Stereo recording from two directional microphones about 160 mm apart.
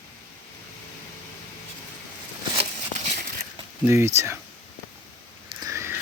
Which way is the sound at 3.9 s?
15° right (ahead or behind).